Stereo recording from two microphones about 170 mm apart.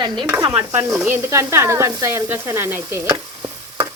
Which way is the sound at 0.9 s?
10° right (ahead or behind).